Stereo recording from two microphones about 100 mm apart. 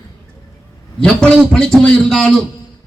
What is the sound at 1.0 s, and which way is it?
A man's voice, 5° left (ahead or behind).